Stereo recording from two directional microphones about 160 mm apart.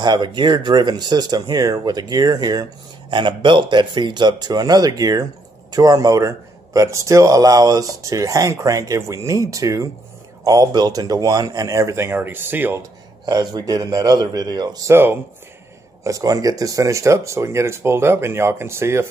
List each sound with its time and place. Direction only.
0.0 s speech: 25° right (ahead or behind)
13.2 s speech: 25° right (ahead or behind)